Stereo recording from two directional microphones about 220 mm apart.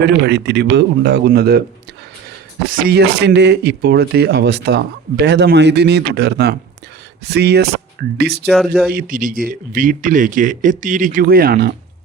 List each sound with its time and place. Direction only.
0.0 s speech: 50° right (ahead or behind)
2.6 s speech: 40° right (ahead or behind)
8.4 s speech: centre (ahead or behind)
8.9 s speech: 40° right (ahead or behind)